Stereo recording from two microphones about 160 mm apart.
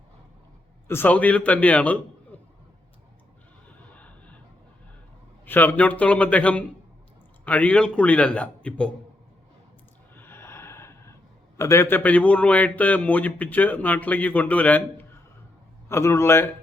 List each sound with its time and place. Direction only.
0.9 s a man's voice: 10° left (ahead or behind)
3.7 s music: 10° left (ahead or behind)
5.5 s a man's voice: 10° left (ahead or behind)
10.2 s gasp: 15° left (ahead or behind)
11.5 s a man's voice: 20° left (ahead or behind)